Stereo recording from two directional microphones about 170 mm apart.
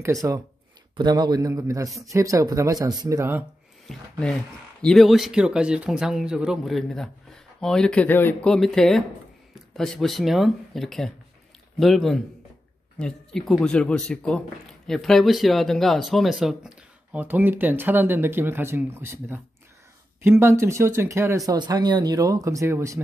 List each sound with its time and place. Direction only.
0.0 s speech: 20° right (ahead or behind)
3.8 s speech: 5° left (ahead or behind); by 23.0 s 15° right (ahead or behind)